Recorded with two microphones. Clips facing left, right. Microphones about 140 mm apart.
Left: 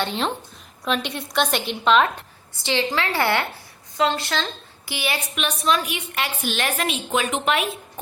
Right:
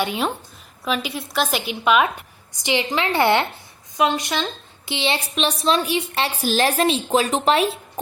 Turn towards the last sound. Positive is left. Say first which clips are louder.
# right 4 dB
turn(degrees=-30)  # may be behind; listen again after turning